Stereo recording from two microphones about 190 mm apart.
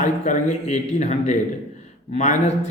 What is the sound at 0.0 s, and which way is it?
A man's voice, 40° left (ahead or behind).